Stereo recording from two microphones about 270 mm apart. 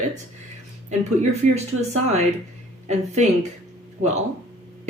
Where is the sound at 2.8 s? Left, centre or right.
Right.